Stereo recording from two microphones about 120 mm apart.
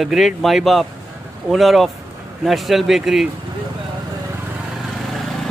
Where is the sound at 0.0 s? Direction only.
Centre (ahead or behind).